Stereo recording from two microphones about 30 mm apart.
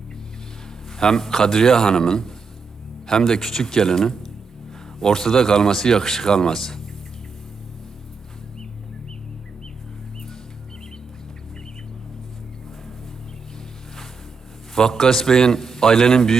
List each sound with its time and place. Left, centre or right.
0.9 s speech: centre
14.8 s speech: centre